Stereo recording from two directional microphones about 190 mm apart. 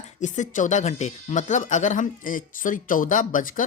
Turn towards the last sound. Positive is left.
turn(degrees=45)  # may be behind; listen again after turning